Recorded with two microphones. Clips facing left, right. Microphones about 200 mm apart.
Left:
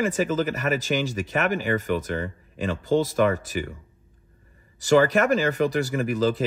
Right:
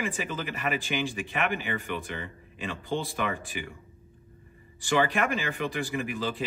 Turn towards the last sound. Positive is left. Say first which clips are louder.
# left 8 dB
turn(degrees=45)  # may be behind; listen again after turning